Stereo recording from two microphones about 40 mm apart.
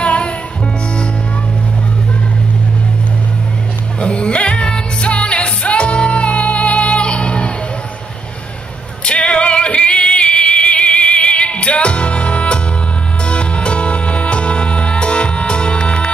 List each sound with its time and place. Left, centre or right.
0.0 s music: left
4.0 s music: left
9.0 s music: left